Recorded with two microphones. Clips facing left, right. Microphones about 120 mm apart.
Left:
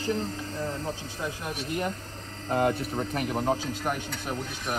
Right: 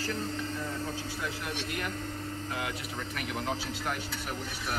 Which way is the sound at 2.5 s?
45° left (ahead or behind).